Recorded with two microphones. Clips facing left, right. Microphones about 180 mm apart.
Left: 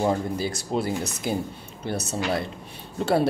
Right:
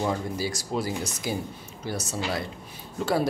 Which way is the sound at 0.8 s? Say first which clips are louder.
Left 3 dB; 55° left (ahead or behind).